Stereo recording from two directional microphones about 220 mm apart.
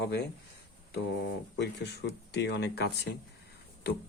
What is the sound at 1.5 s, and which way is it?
Speech, 50° left (ahead or behind).